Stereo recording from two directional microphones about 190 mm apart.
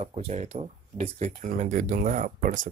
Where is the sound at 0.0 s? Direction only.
35° right (ahead or behind).